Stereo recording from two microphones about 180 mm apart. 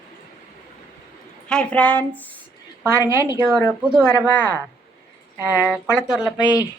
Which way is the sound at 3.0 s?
15° right (ahead or behind).